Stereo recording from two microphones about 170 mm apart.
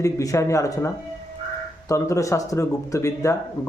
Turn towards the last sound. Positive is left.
turn(degrees=15)  # may be behind; listen again after turning